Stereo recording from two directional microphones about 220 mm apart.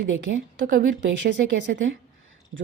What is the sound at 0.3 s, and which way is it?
Speech, 40° right (ahead or behind).